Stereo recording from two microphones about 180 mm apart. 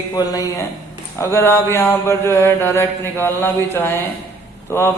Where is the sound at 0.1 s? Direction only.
20° left (ahead or behind).